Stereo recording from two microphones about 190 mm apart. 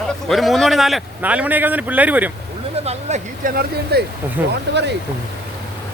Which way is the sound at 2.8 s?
35° right (ahead or behind).